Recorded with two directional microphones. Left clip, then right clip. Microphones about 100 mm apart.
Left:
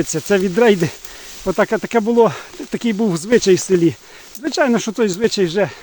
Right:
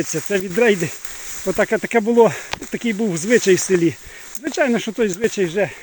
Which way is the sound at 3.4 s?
30° left (ahead or behind).